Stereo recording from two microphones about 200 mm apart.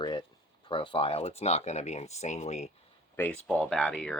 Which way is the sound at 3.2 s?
10° left (ahead or behind).